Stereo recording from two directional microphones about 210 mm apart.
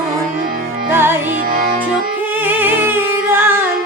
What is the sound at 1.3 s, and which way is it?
Music, 40° right (ahead or behind).